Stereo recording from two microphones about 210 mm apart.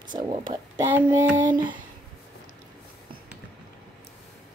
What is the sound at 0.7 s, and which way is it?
Child singing, 10° right (ahead or behind).